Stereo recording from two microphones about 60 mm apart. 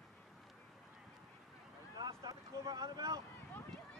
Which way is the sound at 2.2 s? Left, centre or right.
Right.